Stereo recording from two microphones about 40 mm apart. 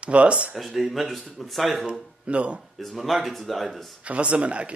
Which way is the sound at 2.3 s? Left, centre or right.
Right.